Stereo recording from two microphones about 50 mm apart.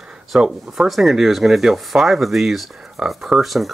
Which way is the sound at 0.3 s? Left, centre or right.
Centre.